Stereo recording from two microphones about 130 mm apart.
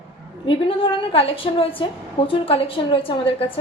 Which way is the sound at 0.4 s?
45° left (ahead or behind).